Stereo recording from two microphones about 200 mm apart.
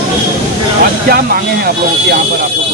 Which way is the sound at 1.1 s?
50° right (ahead or behind).